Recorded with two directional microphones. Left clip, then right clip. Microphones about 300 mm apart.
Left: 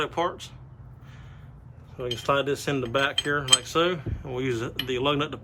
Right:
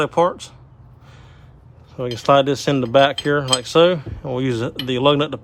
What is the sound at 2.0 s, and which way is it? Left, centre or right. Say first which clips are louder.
Speech: right 10 dB; right.